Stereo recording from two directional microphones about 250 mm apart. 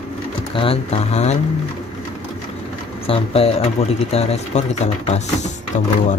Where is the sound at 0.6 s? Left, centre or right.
Left.